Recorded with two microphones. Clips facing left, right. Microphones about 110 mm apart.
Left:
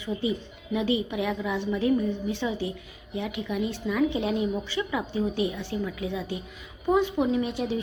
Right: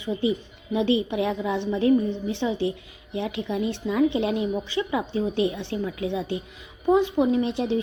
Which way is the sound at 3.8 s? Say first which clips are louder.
Right 2 dB; 5° right (ahead or behind).